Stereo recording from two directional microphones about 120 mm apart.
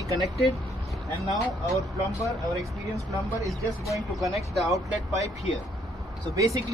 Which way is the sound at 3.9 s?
Centre (ahead or behind).